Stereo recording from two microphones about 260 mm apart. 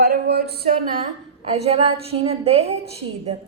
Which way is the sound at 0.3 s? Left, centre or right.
Right.